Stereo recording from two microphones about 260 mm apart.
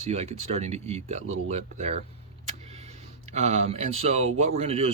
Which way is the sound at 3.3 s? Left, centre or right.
Right.